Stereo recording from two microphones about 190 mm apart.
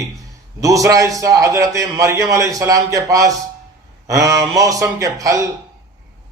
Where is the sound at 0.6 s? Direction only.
15° right (ahead or behind).